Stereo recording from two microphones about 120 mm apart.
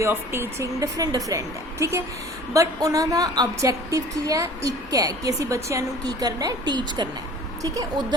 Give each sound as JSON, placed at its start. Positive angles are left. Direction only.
{"t": 0.0, "sound": "a woman's voice", "side_deg": -20}